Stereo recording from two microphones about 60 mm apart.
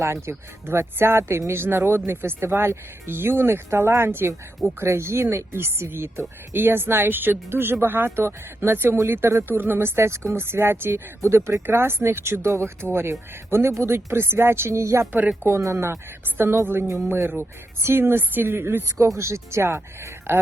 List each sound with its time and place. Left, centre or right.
0.0 s speech: right
16.2 s a woman's voice: right
19.0 s speech: right